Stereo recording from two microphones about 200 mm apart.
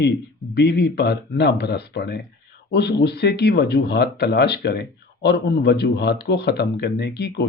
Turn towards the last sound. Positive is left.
turn(degrees=55)  # may be behind; listen again after turning